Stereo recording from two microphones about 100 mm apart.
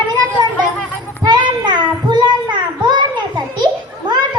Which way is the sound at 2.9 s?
50° right (ahead or behind).